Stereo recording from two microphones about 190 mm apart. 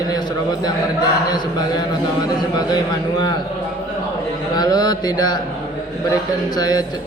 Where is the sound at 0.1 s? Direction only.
20° left (ahead or behind).